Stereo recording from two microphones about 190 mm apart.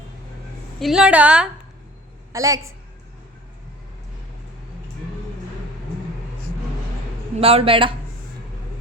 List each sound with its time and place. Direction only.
0.8 s a woman's voice: centre (ahead or behind)
2.3 s a woman's voice: 15° right (ahead or behind)
7.3 s a man's voice: 30° right (ahead or behind)